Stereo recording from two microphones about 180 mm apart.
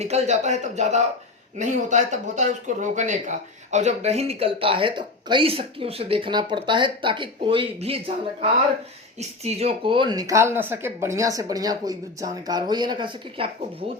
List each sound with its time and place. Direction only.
0.0 s speech: 40° right (ahead or behind)